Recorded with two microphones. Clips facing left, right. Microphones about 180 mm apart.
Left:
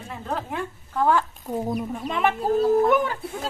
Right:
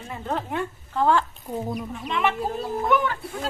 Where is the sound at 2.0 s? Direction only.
40° left (ahead or behind).